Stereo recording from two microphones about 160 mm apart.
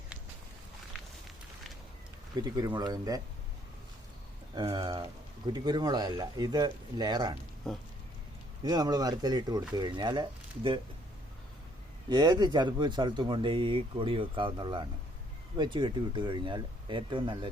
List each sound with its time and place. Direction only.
2.3 s speech: 25° right (ahead or behind)
4.5 s speech: 30° right (ahead or behind)
8.6 s speech: 25° right (ahead or behind)
12.0 s speech: 25° right (ahead or behind)